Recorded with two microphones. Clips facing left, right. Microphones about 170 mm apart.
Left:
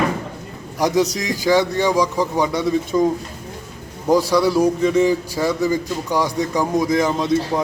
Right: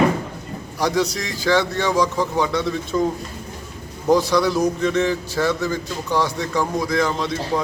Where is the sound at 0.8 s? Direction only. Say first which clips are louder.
Left 3 dB; 15° left (ahead or behind).